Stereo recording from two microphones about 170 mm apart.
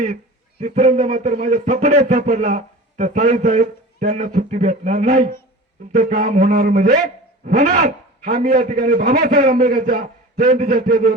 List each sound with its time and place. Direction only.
0.6 s a man's voice: 40° right (ahead or behind)
5.0 s a man's voice: 55° right (ahead or behind)